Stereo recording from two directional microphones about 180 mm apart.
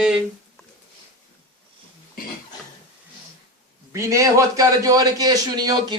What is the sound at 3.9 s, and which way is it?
A man's voice, 15° right (ahead or behind).